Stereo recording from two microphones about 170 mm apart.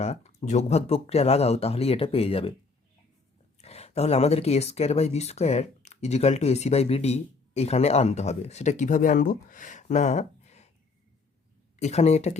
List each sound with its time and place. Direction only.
0.0 s speech: 40° left (ahead or behind)
3.6 s speech: 40° left (ahead or behind)
11.8 s speech: 40° left (ahead or behind)